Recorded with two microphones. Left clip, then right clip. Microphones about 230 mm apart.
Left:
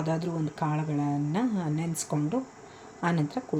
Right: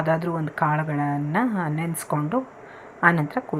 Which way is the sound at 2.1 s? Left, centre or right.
Right.